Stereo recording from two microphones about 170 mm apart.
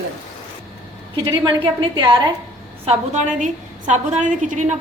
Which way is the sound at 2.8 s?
45° right (ahead or behind).